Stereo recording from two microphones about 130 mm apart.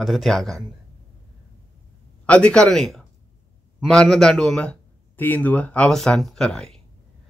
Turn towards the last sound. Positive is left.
turn(degrees=5)  # may be behind; listen again after turning